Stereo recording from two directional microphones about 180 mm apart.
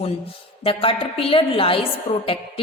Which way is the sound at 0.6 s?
30° left (ahead or behind).